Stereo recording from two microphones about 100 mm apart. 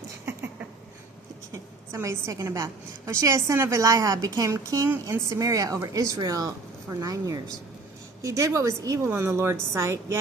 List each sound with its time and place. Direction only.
1.5 s a woman's voice: 30° right (ahead or behind)